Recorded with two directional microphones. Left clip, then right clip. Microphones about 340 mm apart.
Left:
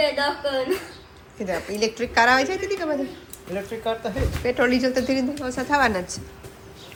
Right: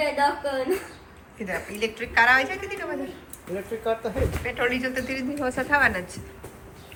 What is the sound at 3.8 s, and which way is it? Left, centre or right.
Speech, centre.